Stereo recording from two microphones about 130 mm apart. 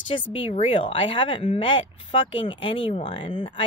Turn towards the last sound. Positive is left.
turn(degrees=40)  # may be behind; listen again after turning